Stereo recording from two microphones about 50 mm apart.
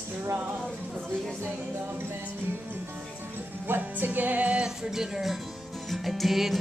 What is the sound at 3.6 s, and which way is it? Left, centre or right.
Music, right.